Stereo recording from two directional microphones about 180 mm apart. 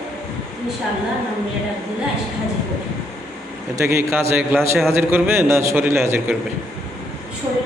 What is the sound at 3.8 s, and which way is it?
A man's voice, 15° right (ahead or behind).